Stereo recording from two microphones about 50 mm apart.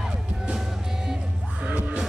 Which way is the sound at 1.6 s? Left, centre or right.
Right.